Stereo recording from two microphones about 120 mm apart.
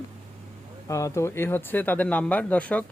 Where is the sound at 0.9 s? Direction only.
25° left (ahead or behind).